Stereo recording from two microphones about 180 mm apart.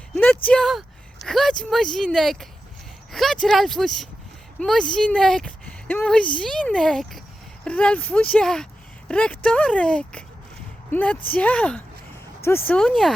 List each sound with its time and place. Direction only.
0.4 s speech: 5° left (ahead or behind)